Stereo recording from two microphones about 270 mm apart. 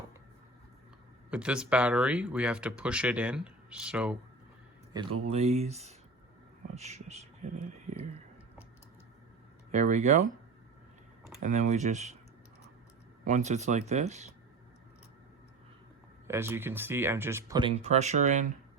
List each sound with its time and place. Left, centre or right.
1.3 s speech: centre
5.3 s speech: right
9.7 s speech: right
11.4 s speech: right
13.2 s speech: right
16.2 s speech: centre; by 18.4 s right